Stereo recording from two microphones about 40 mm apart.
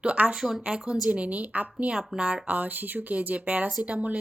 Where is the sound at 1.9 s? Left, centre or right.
Right.